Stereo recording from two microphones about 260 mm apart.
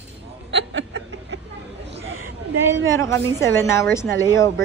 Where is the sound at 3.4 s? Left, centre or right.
Centre.